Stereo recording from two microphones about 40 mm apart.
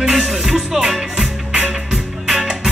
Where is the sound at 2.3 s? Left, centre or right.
Centre.